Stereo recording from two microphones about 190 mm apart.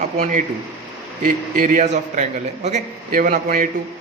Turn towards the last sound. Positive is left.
turn(degrees=-45)  # may be behind; listen again after turning